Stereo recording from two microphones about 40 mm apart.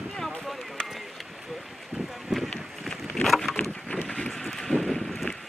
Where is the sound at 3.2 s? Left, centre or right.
Centre.